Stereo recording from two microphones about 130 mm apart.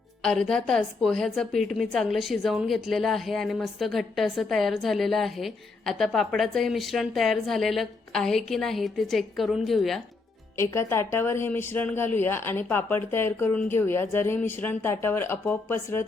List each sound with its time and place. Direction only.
0.2 s a woman's voice: 5° left (ahead or behind)
10.6 s speech: 20° left (ahead or behind)